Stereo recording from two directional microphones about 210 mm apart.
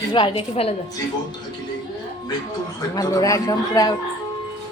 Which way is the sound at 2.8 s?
15° left (ahead or behind).